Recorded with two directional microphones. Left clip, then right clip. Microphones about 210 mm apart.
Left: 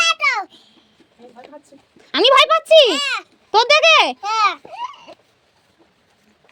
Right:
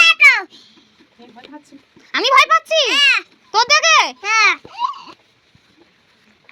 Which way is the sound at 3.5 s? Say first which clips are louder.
Left 1 dB; 55° left (ahead or behind).